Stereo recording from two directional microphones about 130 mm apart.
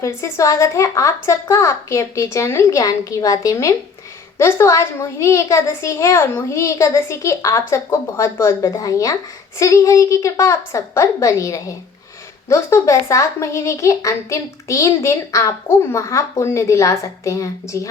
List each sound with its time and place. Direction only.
0.0 s speech: 20° left (ahead or behind)